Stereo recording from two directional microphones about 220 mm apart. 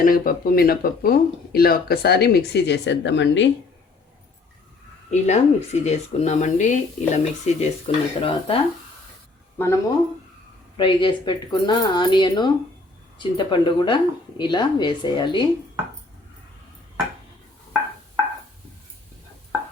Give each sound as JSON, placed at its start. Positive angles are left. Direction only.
{"t": 0.0, "sound": "speech", "side_deg": 40}
{"t": 5.1, "sound": "speech", "side_deg": 30}
{"t": 9.6, "sound": "speech", "side_deg": 10}
{"t": 10.8, "sound": "speech", "side_deg": 20}